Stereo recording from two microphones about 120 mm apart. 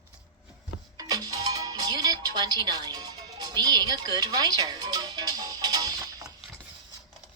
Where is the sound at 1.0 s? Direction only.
35° right (ahead or behind).